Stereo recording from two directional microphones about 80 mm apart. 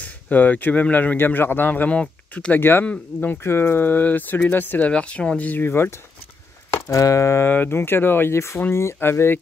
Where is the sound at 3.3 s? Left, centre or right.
Left.